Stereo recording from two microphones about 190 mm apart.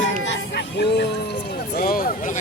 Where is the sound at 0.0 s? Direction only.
70° left (ahead or behind).